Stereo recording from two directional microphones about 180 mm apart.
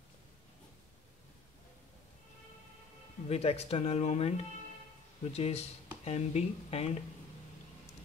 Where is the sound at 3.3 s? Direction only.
35° left (ahead or behind).